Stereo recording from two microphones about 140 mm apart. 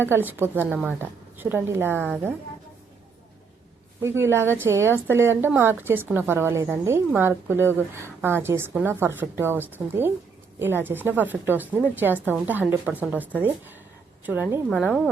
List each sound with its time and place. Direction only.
0.0 s a woman's voice: 15° right (ahead or behind)
4.0 s a woman's voice: 20° right (ahead or behind)